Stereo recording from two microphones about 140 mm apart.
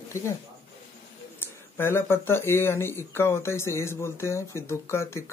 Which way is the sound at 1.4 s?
15° left (ahead or behind).